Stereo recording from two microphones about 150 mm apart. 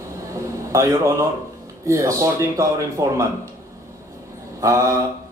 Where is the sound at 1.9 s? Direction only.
20° right (ahead or behind).